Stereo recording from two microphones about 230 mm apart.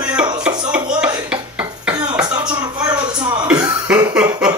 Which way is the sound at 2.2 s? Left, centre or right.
Centre.